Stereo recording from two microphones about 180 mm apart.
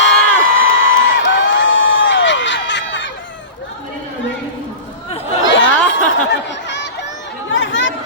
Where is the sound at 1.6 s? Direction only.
90° left.